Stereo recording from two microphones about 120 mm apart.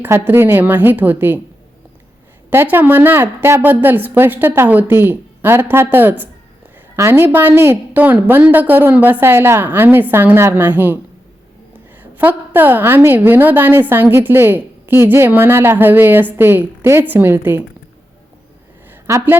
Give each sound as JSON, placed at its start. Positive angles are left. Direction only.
{"t": 0.0, "sound": "a woman's voice", "side_deg": -20}
{"t": 2.5, "sound": "a woman's voice", "side_deg": -20}
{"t": 12.1, "sound": "a woman's voice", "side_deg": -15}
{"t": 18.9, "sound": "a sound", "side_deg": -20}